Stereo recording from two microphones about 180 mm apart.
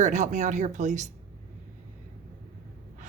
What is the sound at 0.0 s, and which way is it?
Speech, 45° right (ahead or behind).